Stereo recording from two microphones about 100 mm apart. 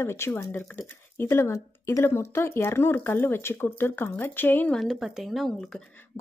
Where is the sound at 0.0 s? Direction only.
25° left (ahead or behind).